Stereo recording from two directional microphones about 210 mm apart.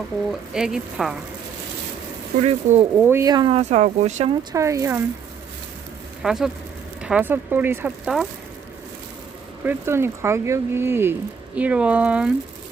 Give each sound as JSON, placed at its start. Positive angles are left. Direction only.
{"t": 0.3, "sound": "speech", "side_deg": 0}
{"t": 2.4, "sound": "speech", "side_deg": -30}
{"t": 3.1, "sound": "speech", "side_deg": -15}
{"t": 4.5, "sound": "speech", "side_deg": -15}
{"t": 6.2, "sound": "speech", "side_deg": 0}
{"t": 9.6, "sound": "speech", "side_deg": -10}